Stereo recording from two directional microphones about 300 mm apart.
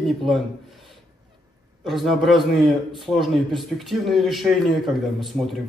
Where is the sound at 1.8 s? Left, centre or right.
Centre.